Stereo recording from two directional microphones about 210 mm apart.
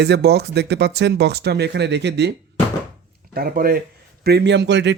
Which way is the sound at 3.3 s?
45° right (ahead or behind).